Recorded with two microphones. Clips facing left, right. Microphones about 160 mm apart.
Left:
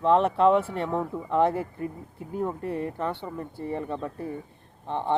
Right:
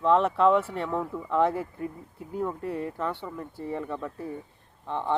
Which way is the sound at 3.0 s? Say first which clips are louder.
Left 1 dB; 25° left (ahead or behind).